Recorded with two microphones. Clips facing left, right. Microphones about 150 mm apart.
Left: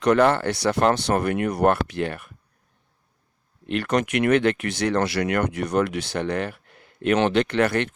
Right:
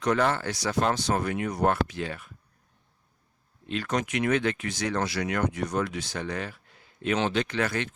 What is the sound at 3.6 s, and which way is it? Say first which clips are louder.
Speech: left 6 dB; 65° left (ahead or behind).